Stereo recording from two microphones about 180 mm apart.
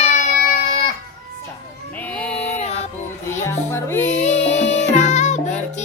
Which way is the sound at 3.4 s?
15° left (ahead or behind).